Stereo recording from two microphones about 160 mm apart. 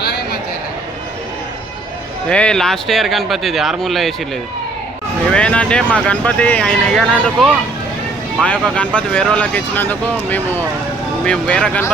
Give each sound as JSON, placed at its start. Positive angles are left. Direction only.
{"t": 2.3, "sound": "speech", "side_deg": 5}
{"t": 5.3, "sound": "speech", "side_deg": 5}